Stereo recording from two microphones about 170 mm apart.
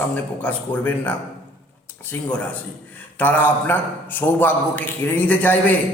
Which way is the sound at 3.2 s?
10° left (ahead or behind).